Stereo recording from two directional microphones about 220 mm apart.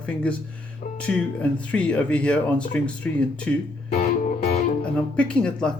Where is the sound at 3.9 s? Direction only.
35° left (ahead or behind).